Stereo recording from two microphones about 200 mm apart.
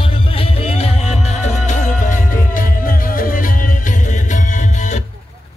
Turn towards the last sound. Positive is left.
turn(degrees=35)  # may be behind; listen again after turning